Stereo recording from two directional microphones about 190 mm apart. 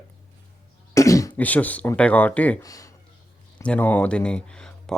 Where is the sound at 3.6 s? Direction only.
10° left (ahead or behind).